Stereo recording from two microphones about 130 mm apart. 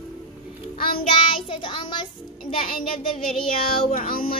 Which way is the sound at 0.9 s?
40° left (ahead or behind).